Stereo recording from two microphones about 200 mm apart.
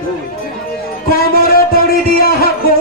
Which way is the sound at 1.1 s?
50° left (ahead or behind).